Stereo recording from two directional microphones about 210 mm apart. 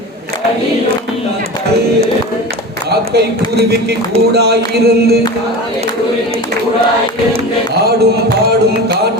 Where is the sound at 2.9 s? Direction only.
50° right (ahead or behind).